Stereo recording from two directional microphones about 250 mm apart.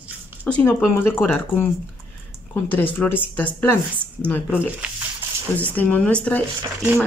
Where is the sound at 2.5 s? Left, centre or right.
Centre.